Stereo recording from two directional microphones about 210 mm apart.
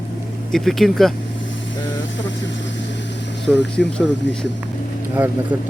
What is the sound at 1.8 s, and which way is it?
Speech, 60° left (ahead or behind).